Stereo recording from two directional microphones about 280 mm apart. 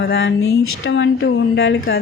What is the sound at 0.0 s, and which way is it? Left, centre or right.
Speech, left.